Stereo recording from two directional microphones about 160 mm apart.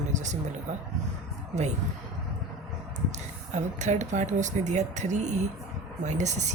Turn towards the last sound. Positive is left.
turn(degrees=-45)  # may be behind; listen again after turning